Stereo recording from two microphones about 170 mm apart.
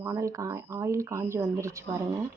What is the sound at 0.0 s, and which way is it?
Speech, 15° right (ahead or behind).